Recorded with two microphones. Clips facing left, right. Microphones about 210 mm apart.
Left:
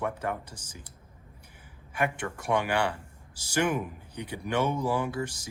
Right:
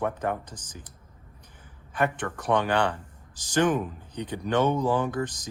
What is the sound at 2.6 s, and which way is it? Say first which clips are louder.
Speech: right 3 dB; 10° left (ahead or behind).